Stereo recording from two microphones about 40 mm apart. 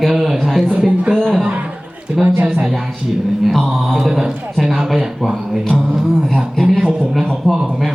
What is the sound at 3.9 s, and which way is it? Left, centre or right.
Speech, centre.